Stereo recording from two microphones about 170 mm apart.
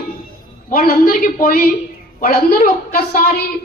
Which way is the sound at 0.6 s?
60° left (ahead or behind).